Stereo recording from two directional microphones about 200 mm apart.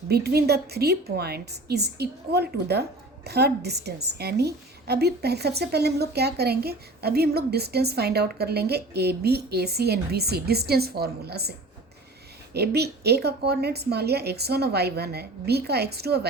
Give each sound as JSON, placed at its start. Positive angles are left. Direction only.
{"t": 0.1, "sound": "a woman's voice", "side_deg": -55}
{"t": 12.5, "sound": "a woman's voice", "side_deg": -55}